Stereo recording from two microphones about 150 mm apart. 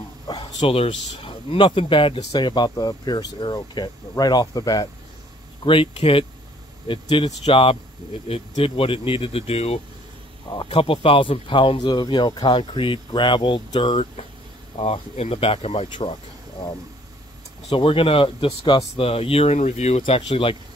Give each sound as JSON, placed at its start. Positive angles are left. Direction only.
{"t": 0.6, "sound": "speech", "side_deg": 40}
{"t": 5.7, "sound": "speech", "side_deg": 35}
{"t": 17.6, "sound": "speech", "side_deg": 40}